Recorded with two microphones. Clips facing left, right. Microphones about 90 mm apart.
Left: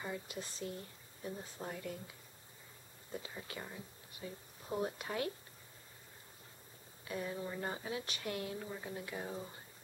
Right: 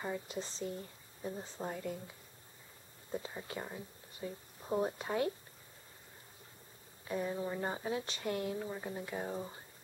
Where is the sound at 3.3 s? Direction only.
20° right (ahead or behind).